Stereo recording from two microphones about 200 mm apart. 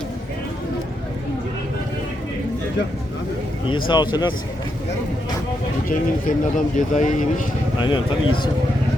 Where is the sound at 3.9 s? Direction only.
20° left (ahead or behind).